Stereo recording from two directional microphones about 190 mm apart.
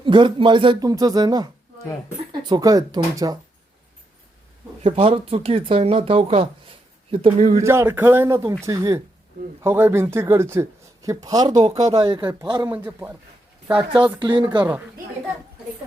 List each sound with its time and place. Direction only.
0.0 s speech: 25° right (ahead or behind)
4.8 s speech: 30° right (ahead or behind)
7.3 s speech: 45° right (ahead or behind)
7.6 s speech: 15° right (ahead or behind)
12.7 s speech: 10° right (ahead or behind)
14.0 s speech: 25° right (ahead or behind)
14.6 s speech: 10° right (ahead or behind)